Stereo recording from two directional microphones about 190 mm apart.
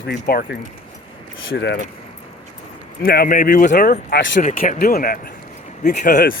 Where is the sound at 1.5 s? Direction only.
65° left (ahead or behind).